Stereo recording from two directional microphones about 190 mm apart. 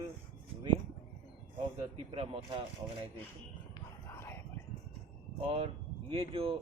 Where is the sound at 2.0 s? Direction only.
30° right (ahead or behind).